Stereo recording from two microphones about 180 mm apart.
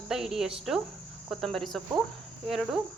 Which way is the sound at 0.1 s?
Centre (ahead or behind).